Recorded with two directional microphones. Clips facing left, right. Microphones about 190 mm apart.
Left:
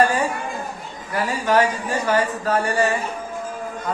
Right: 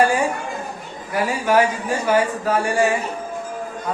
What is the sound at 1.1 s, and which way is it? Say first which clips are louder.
Speech: right 1 dB; 10° right (ahead or behind).